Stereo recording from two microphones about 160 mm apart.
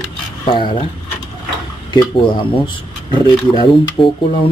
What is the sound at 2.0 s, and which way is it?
Speech, 30° left (ahead or behind).